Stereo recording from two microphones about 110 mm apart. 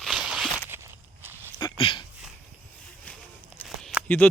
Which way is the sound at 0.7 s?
20° right (ahead or behind).